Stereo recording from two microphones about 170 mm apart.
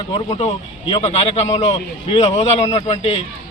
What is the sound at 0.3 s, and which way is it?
A man's voice, 35° left (ahead or behind).